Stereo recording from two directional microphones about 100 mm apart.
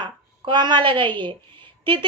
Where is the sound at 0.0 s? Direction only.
50° right (ahead or behind).